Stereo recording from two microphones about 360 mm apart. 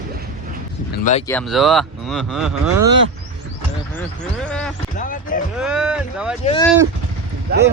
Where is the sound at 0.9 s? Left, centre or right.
Centre.